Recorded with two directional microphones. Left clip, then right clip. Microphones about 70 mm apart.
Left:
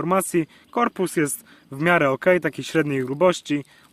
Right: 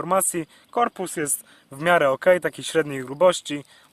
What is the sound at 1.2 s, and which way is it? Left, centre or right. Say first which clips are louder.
Speech: left 4 dB; centre.